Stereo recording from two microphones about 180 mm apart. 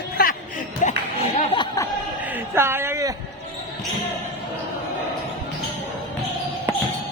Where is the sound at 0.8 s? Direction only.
40° left (ahead or behind).